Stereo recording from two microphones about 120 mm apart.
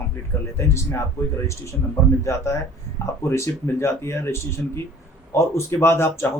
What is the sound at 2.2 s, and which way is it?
Speech, 25° left (ahead or behind).